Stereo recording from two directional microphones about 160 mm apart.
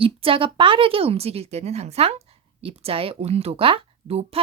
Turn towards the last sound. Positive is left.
turn(degrees=-35)  # may be behind; listen again after turning